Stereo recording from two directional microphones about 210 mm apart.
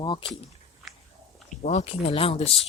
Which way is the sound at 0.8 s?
Centre (ahead or behind).